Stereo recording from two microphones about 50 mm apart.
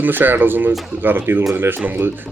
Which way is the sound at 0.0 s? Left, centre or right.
Right.